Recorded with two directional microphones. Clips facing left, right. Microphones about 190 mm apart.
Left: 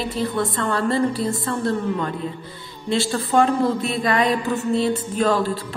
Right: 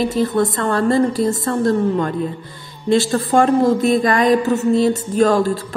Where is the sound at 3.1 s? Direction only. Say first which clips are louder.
Right 4 dB; 45° right (ahead or behind).